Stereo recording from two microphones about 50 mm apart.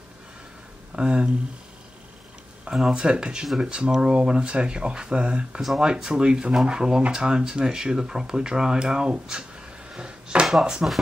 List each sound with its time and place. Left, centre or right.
0.9 s speech: centre
2.7 s speech: centre
5.6 s speech: centre
5.9 s speech: centre